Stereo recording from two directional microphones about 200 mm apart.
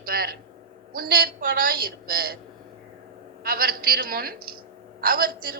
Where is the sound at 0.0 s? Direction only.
50° right (ahead or behind).